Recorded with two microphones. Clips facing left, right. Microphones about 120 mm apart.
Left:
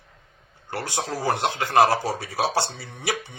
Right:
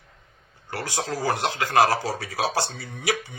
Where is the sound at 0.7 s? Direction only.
25° left (ahead or behind).